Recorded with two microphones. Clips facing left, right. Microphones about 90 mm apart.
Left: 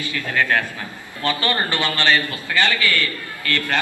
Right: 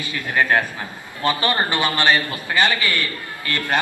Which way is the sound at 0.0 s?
20° right (ahead or behind).